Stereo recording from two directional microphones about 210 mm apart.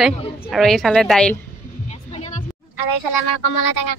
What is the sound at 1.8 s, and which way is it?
Music, 35° left (ahead or behind).